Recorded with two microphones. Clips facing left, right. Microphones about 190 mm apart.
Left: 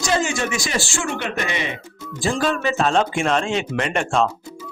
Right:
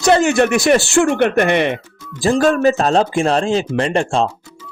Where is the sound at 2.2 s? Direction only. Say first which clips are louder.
Right 8 dB; 40° right (ahead or behind).